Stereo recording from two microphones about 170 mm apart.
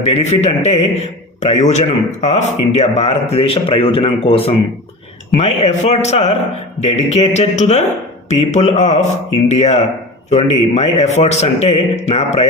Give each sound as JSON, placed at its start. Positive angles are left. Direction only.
{"t": 0.0, "sound": "speech", "side_deg": 40}